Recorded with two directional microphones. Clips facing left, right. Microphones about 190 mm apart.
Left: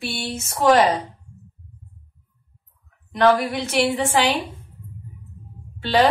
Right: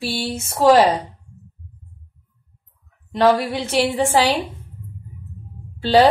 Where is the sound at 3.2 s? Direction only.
30° right (ahead or behind).